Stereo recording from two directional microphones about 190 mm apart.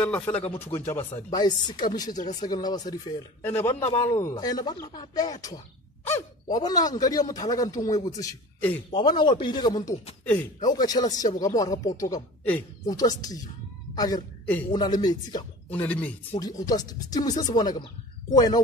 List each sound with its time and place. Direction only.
0.0 s a man's voice: 5° left (ahead or behind)
1.3 s a man's voice: 20° left (ahead or behind)
8.9 s a woman's voice: 25° left (ahead or behind)
15.7 s a man's voice: 10° left (ahead or behind)
16.3 s speech: 20° left (ahead or behind)